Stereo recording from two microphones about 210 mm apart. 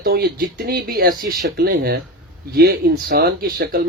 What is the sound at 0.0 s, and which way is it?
Speech, 45° right (ahead or behind).